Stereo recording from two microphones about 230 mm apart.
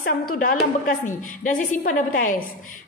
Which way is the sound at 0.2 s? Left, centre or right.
Left.